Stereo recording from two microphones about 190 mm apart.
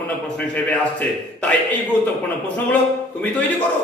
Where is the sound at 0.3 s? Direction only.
5° left (ahead or behind).